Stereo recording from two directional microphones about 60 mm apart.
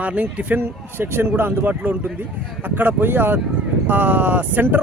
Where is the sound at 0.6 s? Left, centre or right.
Right.